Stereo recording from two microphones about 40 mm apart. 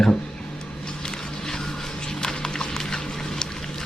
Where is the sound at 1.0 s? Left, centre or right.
Centre.